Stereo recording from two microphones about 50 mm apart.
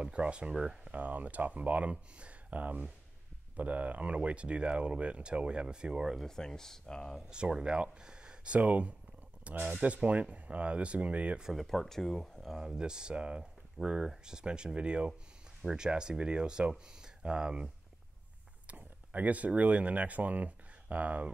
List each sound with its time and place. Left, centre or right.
0.0 s speech: right
0.9 s speech: right; by 6.2 s centre
6.2 s speech: centre
7.2 s speech: centre
8.5 s speech: right
9.8 s speech: centre
11.5 s speech: centre
12.5 s speech: centre
18.7 s speech: right